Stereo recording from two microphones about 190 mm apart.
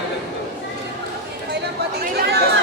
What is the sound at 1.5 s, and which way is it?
Chatter, 60° right (ahead or behind).